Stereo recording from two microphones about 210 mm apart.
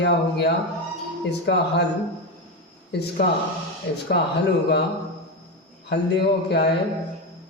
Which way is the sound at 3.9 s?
50° left (ahead or behind).